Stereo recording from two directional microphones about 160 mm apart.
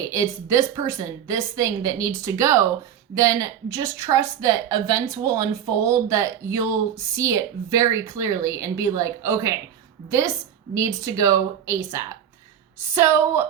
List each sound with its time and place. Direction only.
0.1 s a woman's voice: 20° right (ahead or behind)